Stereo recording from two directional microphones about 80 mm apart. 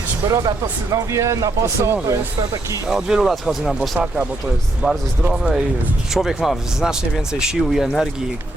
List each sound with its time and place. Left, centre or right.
0.3 s speech: right
2.9 s speech: centre
5.3 s speech: centre